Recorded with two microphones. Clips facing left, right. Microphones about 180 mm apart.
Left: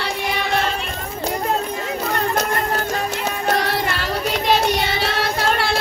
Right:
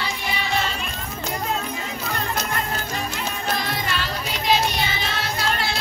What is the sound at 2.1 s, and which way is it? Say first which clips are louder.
Music: left 5 dB; 50° left (ahead or behind).